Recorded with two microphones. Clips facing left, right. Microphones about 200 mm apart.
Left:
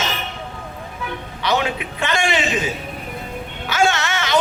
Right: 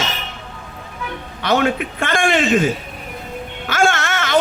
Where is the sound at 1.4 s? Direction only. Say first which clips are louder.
Right 4 dB; 50° right (ahead or behind).